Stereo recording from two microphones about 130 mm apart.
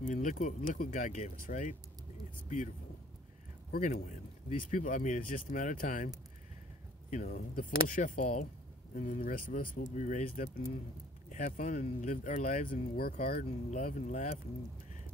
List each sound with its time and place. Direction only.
0.0 s speech: 80° left
3.8 s speech: 75° left (ahead or behind)
7.1 s speech: 85° left
7.9 s speech: 75° left (ahead or behind)
8.9 s speech: 85° left
9.9 s speech: 70° left (ahead or behind)